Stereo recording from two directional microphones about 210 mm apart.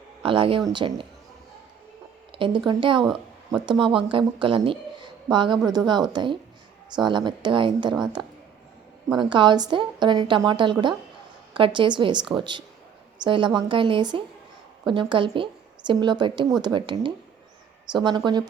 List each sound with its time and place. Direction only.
0.2 s a woman's voice: 25° right (ahead or behind)
2.3 s a sound: 25° right (ahead or behind)
2.6 s a woman's voice: 25° right (ahead or behind)
9.1 s a woman's voice: 20° right (ahead or behind)